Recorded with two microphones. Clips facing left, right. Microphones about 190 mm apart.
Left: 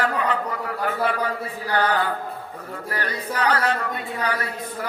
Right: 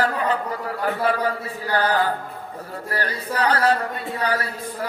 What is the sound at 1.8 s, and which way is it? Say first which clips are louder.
Chant: right 1 dB; 35° right (ahead or behind).